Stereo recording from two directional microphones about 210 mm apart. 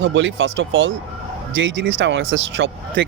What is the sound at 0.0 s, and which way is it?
Speech, 60° right (ahead or behind).